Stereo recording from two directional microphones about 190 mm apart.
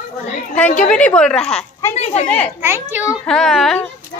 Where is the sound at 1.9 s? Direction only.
35° left (ahead or behind).